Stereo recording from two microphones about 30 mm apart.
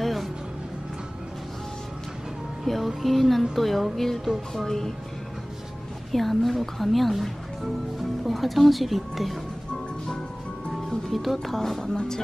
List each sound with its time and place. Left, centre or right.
0.0 s music: centre
2.6 s music: centre
3.0 s speech: centre
6.1 s speech: centre
10.7 s music: centre
11.4 s speech: centre
11.9 s speech: left